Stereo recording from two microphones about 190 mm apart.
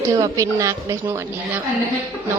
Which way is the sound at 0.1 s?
15° right (ahead or behind).